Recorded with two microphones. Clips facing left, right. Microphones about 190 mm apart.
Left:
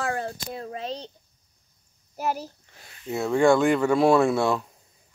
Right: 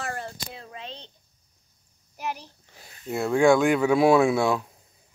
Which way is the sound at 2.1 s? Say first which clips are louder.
Left 5 dB; 40° left (ahead or behind).